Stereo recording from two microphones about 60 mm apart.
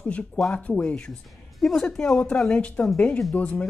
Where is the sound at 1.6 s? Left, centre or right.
Centre.